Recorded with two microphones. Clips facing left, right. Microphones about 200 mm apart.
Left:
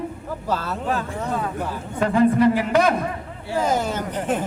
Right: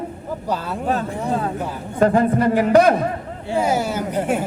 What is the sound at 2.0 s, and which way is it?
Speech, 45° right (ahead or behind).